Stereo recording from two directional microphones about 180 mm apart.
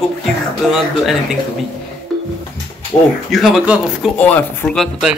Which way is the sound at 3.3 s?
Centre (ahead or behind).